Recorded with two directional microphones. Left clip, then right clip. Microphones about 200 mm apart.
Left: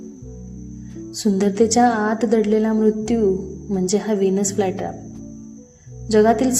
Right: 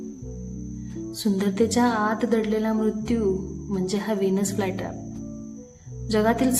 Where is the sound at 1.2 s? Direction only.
15° left (ahead or behind).